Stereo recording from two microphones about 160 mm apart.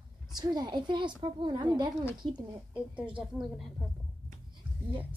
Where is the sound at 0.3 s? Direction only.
25° right (ahead or behind).